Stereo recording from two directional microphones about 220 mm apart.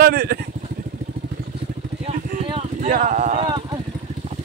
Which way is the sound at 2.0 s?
25° right (ahead or behind).